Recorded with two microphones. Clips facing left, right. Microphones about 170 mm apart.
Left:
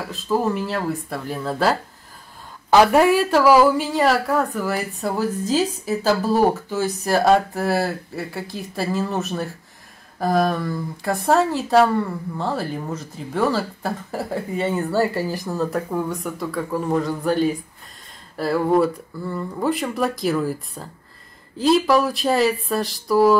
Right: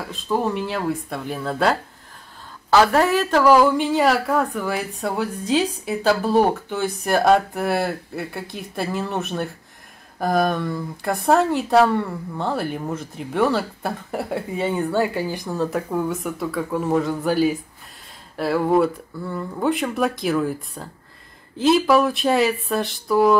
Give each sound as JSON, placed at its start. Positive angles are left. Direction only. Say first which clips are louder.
{"t": 0.1, "sound": "a woman's voice", "louder": "left 1 dB", "side_deg": 0}
{"t": 2.7, "sound": "a woman's voice", "louder": "left 2 dB", "side_deg": 15}
{"t": 6.7, "sound": "a woman's voice", "louder": "left 1 dB", "side_deg": 0}